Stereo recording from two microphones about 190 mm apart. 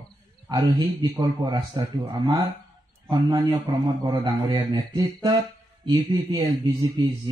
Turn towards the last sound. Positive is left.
turn(degrees=-20)  # may be behind; listen again after turning